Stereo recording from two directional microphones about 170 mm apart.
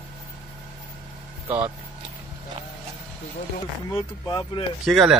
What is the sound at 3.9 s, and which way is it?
Speech, 25° left (ahead or behind).